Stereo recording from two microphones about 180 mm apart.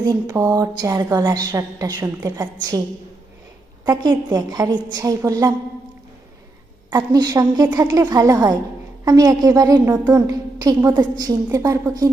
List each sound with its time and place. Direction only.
0.0 s a woman's voice: 20° right (ahead or behind)
3.8 s a woman's voice: 20° right (ahead or behind)
6.9 s a woman's voice: 20° right (ahead or behind)